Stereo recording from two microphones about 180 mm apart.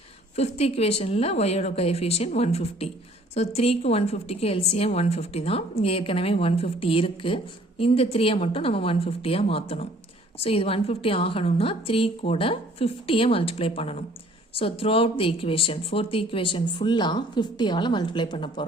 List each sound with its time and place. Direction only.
0.3 s a woman's voice: 35° left (ahead or behind)